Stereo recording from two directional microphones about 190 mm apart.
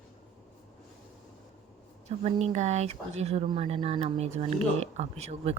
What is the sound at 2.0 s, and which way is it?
Speech, 35° right (ahead or behind).